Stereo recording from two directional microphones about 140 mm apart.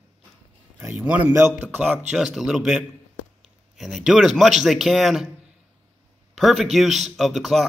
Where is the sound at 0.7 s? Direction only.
15° right (ahead or behind).